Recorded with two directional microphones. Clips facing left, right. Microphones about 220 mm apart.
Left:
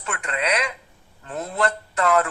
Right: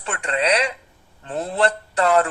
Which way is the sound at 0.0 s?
30° right (ahead or behind).